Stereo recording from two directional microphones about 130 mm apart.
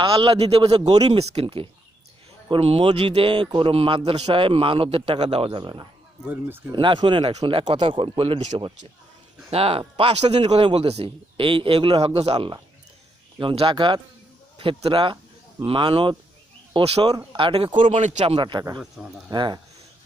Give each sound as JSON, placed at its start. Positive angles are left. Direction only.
{"t": 0.0, "sound": "a man's voice", "side_deg": -45}
{"t": 0.7, "sound": "speech", "side_deg": -30}
{"t": 1.2, "sound": "a man's voice", "side_deg": -50}
{"t": 5.5, "sound": "speech", "side_deg": -35}
{"t": 6.2, "sound": "speech", "side_deg": -15}
{"t": 6.7, "sound": "speech", "side_deg": -40}
{"t": 9.5, "sound": "a man's voice", "side_deg": -50}
{"t": 17.8, "sound": "speech", "side_deg": -65}
{"t": 18.3, "sound": "speech", "side_deg": -40}
{"t": 18.8, "sound": "speech", "side_deg": -5}
{"t": 19.3, "sound": "speech", "side_deg": -35}